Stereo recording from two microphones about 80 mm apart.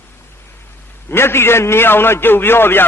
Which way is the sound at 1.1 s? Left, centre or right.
Left.